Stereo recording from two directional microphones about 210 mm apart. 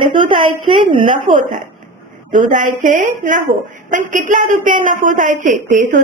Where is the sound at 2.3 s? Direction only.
40° right (ahead or behind).